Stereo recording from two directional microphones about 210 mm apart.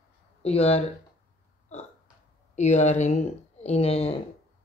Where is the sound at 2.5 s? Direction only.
35° left (ahead or behind).